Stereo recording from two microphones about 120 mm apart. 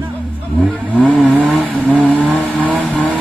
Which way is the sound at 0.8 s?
10° left (ahead or behind).